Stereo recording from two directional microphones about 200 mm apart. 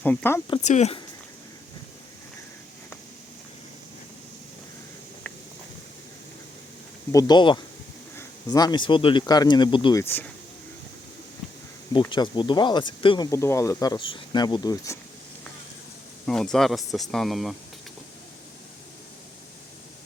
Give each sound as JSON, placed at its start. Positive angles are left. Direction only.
{"t": 0.0, "sound": "speech", "side_deg": 10}
{"t": 0.6, "sound": "speech", "side_deg": 35}
{"t": 7.1, "sound": "speech", "side_deg": 20}
{"t": 10.0, "sound": "speech", "side_deg": 10}
{"t": 11.9, "sound": "speech", "side_deg": 25}
{"t": 13.3, "sound": "speech", "side_deg": 15}
{"t": 16.2, "sound": "speech", "side_deg": 5}